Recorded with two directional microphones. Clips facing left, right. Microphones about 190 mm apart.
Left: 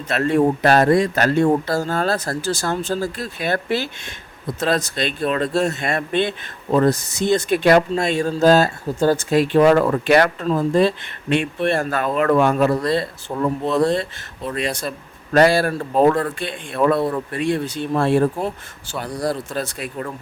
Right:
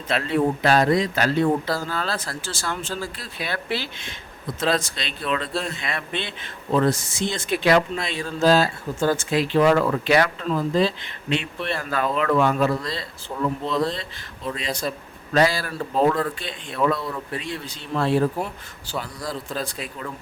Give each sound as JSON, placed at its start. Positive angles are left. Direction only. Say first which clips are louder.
{"t": 0.2, "sound": "speech", "louder": "left 6 dB", "side_deg": 45}
{"t": 15.3, "sound": "speech", "louder": "left 6 dB", "side_deg": 55}
{"t": 18.9, "sound": "speech", "louder": "left 6 dB", "side_deg": 60}